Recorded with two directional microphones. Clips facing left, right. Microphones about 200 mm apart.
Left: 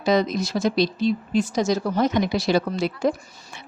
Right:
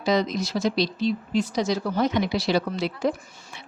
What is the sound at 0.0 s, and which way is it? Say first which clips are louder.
Speech: left 3 dB; 55° left (ahead or behind).